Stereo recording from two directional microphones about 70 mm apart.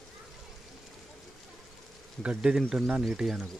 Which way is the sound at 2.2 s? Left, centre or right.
Centre.